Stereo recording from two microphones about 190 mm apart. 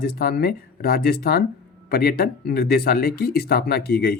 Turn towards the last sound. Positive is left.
turn(degrees=55)  # may be behind; listen again after turning